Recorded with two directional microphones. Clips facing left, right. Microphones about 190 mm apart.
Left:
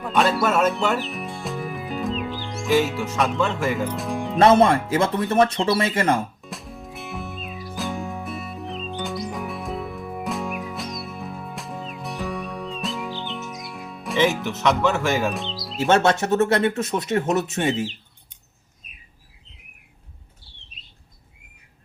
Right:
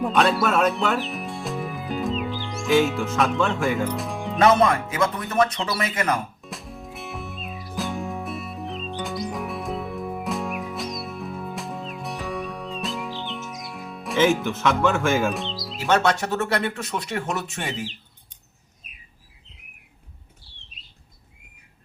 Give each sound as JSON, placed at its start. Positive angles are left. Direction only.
{"t": 0.0, "sound": "speech", "side_deg": 0}
{"t": 4.4, "sound": "speech", "side_deg": 30}
{"t": 6.4, "sound": "music", "side_deg": 0}
{"t": 15.9, "sound": "speech", "side_deg": 25}
{"t": 20.4, "sound": "squawk", "side_deg": 0}